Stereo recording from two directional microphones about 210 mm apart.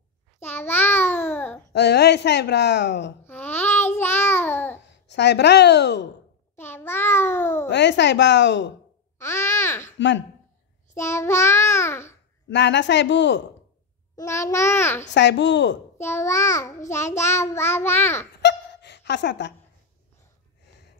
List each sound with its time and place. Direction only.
0.4 s babbling: 10° left (ahead or behind)
1.7 s speech: 55° left (ahead or behind)
3.3 s babbling: 10° left (ahead or behind)
5.0 s speech: 55° left (ahead or behind)
6.5 s a sound: 10° left (ahead or behind)
7.6 s a woman's voice: 55° left (ahead or behind)
9.2 s babbling: 10° left (ahead or behind)
9.9 s speech: 60° left (ahead or behind)
11.0 s child singing: 15° left (ahead or behind)
12.4 s speech: 55° left (ahead or behind)
14.1 s a child's voice: 15° left (ahead or behind)
15.1 s speech: 55° left (ahead or behind)
16.0 s a child's voice: 10° left (ahead or behind)
18.4 s a sound: 55° left (ahead or behind)